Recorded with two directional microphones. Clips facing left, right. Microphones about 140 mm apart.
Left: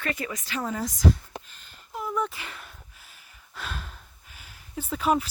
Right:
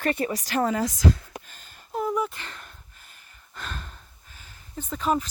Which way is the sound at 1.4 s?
45° right (ahead or behind).